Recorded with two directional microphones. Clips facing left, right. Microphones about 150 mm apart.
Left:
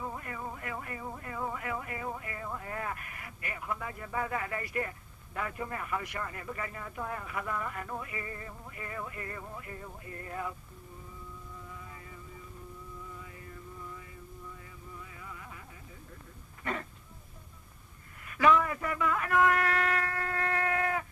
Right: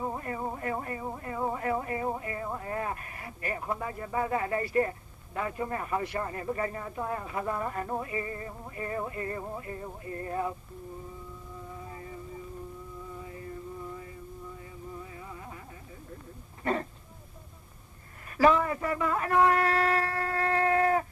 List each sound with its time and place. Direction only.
0.0 s speech: 35° right (ahead or behind)
11.7 s music: 35° right (ahead or behind)
13.8 s a sound: 35° right (ahead or behind)
14.9 s music: 35° right (ahead or behind)
16.7 s speech: 35° right (ahead or behind)
18.3 s a sound: 35° right (ahead or behind)